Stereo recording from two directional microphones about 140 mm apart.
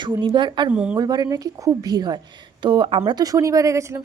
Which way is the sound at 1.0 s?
25° right (ahead or behind).